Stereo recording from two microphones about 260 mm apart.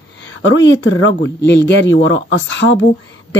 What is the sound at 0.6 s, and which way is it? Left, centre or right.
Speech, left.